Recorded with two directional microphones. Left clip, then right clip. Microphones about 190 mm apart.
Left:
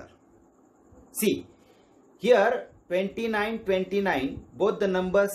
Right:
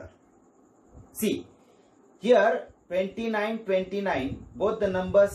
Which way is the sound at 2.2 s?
55° left (ahead or behind).